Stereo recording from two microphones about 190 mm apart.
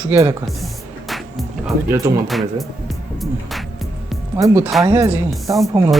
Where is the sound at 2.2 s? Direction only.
Centre (ahead or behind).